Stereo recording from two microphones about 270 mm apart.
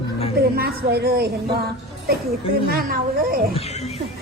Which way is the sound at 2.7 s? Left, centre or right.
Right.